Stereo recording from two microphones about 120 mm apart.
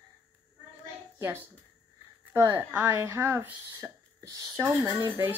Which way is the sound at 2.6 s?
15° right (ahead or behind).